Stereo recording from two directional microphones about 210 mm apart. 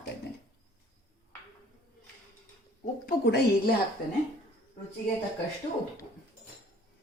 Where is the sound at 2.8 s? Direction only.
45° left (ahead or behind).